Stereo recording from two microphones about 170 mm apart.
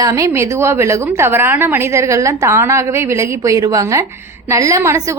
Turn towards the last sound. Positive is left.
turn(degrees=-15)  # may be behind; listen again after turning